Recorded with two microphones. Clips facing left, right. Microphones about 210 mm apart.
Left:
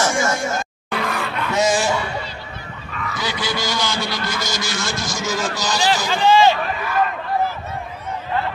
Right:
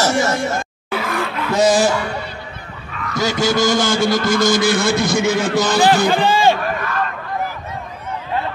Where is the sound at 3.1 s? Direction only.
45° right (ahead or behind).